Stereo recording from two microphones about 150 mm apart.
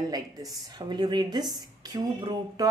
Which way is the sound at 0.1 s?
25° right (ahead or behind).